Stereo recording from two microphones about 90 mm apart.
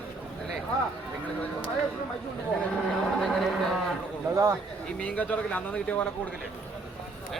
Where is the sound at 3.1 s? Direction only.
5° left (ahead or behind).